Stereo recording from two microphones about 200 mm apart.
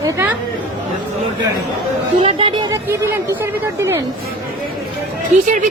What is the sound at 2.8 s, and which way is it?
Speech, 10° right (ahead or behind).